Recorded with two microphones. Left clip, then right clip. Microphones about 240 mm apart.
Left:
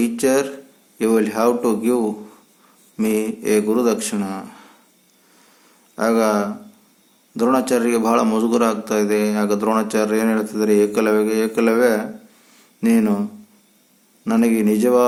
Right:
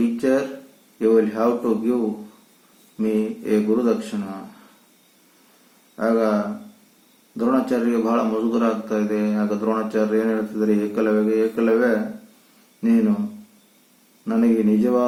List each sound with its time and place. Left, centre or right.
0.2 s a man's voice: left
3.0 s a man's voice: left
6.0 s a man's voice: left
7.3 s a man's voice: left
14.3 s a man's voice: left